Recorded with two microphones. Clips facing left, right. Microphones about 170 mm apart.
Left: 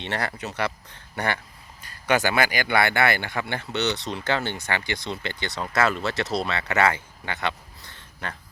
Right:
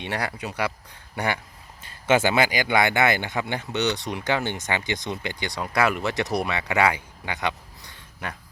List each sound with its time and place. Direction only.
0.0 s speech: 10° right (ahead or behind)
1.8 s speech: 25° right (ahead or behind)